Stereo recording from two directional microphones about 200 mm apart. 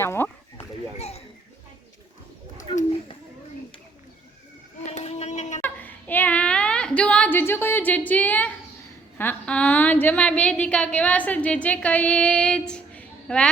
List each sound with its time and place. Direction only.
0.0 s speech: 10° left (ahead or behind)
0.9 s speech: 30° left (ahead or behind)
4.9 s a sound: 35° left (ahead or behind)
5.6 s child singing: 10° left (ahead or behind)
9.1 s a woman's voice: 10° left (ahead or behind)